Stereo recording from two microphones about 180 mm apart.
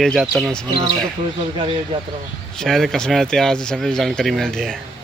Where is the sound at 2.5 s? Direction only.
Centre (ahead or behind).